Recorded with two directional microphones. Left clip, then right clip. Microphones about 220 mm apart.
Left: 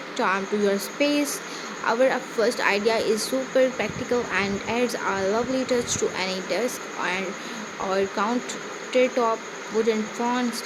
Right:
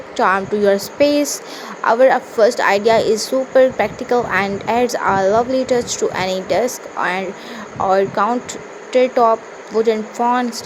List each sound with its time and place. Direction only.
0.2 s a woman's voice: 20° right (ahead or behind)